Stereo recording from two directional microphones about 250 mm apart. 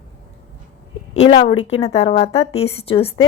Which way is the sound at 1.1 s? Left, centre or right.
Left.